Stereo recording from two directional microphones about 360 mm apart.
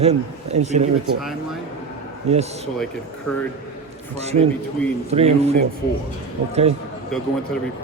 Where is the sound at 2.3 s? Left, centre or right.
Centre.